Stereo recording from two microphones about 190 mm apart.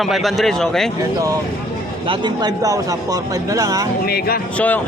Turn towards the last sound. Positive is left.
turn(degrees=10)  # may be behind; listen again after turning